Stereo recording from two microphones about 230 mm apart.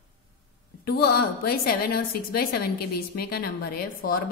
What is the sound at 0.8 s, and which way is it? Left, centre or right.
A woman's voice, left.